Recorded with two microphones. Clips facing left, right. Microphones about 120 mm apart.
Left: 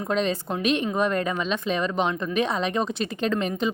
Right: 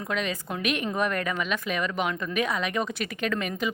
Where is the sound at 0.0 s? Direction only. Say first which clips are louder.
Left 5 dB; 30° left (ahead or behind).